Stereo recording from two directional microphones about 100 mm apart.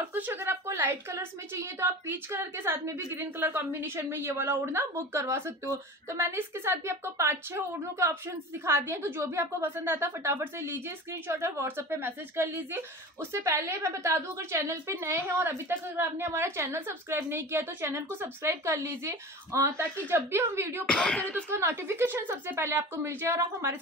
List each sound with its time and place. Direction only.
0.0 s a woman's voice: 20° right (ahead or behind)
20.8 s speech: 10° left (ahead or behind)
21.5 s a woman's voice: 25° right (ahead or behind)